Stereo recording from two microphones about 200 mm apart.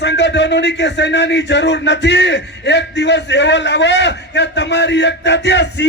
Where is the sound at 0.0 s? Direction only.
60° left (ahead or behind).